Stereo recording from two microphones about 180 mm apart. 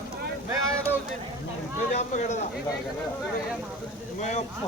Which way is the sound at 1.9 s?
40° left (ahead or behind).